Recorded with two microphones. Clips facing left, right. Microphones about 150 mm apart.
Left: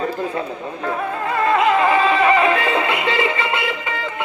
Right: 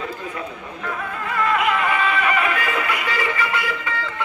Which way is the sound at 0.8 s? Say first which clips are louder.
Left 5 dB; 35° left (ahead or behind).